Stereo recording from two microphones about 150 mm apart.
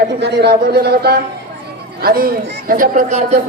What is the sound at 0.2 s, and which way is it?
A man's voice, 90° right.